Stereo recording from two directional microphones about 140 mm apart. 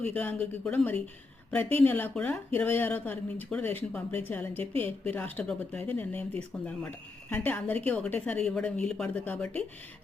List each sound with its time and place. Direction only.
0.0 s speech: 10° left (ahead or behind)
4.6 s a woman's voice: 45° right (ahead or behind)
5.0 s speech: 10° left (ahead or behind)